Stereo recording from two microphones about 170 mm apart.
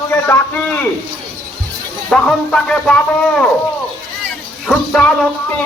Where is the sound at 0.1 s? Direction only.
10° left (ahead or behind).